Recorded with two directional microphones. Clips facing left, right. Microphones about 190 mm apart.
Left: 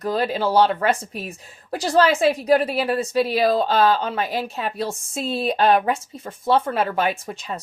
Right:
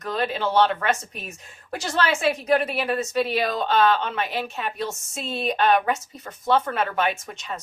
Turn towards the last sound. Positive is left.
turn(degrees=35)  # may be behind; listen again after turning